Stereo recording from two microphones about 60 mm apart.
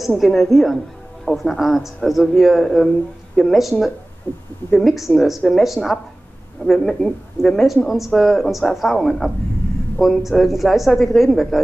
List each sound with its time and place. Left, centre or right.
0.0 s a woman's voice: centre
4.3 s speech: left
4.7 s a woman's voice: centre